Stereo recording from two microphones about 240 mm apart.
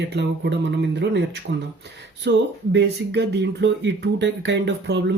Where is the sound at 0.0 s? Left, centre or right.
Right.